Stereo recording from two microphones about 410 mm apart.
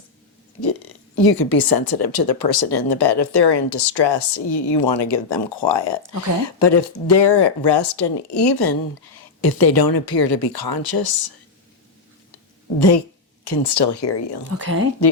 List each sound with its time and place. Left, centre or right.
0.6 s speech: left
13.4 s speech: left
14.5 s speech: right